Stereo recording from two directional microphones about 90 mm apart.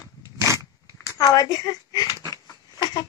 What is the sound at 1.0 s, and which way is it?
Speech, 45° left (ahead or behind).